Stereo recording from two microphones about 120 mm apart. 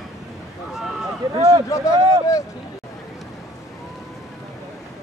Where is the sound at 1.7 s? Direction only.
25° left (ahead or behind).